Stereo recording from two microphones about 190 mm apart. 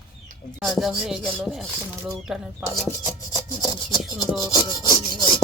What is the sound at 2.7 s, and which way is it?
Speech, 20° left (ahead or behind).